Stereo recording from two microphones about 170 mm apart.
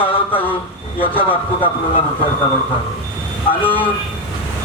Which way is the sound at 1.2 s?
30° left (ahead or behind).